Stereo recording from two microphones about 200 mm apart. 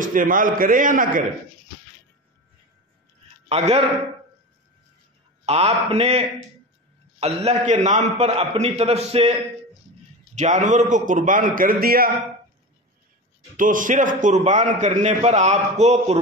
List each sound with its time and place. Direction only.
0.0 s a man's voice: 40° right (ahead or behind)
3.4 s a man's voice: 30° right (ahead or behind)
5.4 s a man's voice: 30° right (ahead or behind); by 12.1 s 45° right (ahead or behind)
13.6 s a man's voice: 40° right (ahead or behind)